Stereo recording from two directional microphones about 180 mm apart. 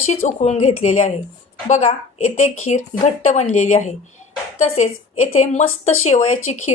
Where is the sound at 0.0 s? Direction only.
40° left (ahead or behind).